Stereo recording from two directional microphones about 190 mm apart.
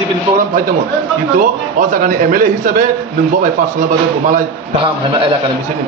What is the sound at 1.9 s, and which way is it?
Speech, 45° right (ahead or behind).